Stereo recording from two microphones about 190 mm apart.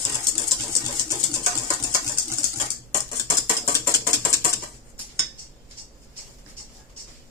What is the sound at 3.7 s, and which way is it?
Rodents, 15° left (ahead or behind).